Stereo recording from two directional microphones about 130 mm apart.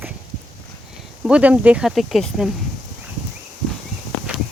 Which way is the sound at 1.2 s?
10° right (ahead or behind).